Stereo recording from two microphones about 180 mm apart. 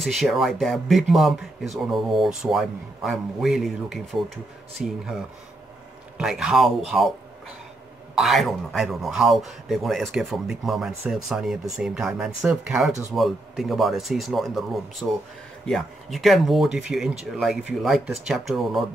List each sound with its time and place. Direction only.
0.0 s speech: centre (ahead or behind)